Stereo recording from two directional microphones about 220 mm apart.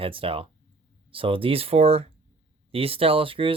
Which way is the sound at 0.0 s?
25° right (ahead or behind).